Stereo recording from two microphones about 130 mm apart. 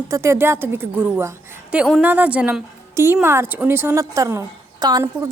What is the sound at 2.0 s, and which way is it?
A woman's voice, 10° right (ahead or behind).